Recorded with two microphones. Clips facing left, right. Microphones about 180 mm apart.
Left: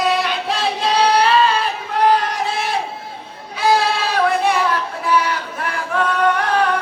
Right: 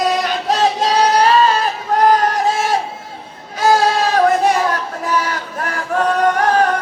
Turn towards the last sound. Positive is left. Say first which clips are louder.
# right 3 dB
turn(degrees=-45)  # may be behind; listen again after turning